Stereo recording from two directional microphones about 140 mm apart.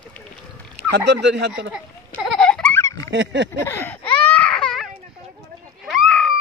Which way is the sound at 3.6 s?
15° left (ahead or behind).